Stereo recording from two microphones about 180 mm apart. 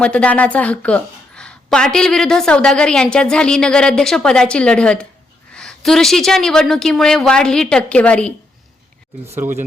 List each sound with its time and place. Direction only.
0.0 s a woman's voice: 5° left (ahead or behind)
9.4 s speech: 10° right (ahead or behind)